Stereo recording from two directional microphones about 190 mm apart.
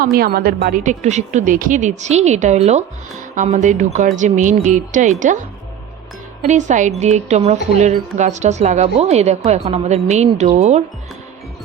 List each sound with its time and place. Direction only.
0.0 s a woman's voice: 50° right (ahead or behind)
6.4 s a woman's voice: 40° right (ahead or behind)